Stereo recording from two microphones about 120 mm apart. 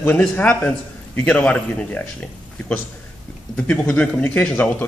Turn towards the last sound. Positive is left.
turn(degrees=10)  # may be behind; listen again after turning